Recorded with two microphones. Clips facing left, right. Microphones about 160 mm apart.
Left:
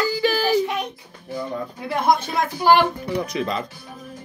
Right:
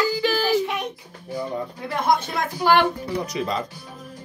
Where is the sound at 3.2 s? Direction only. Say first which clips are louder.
Even; 40° right (ahead or behind).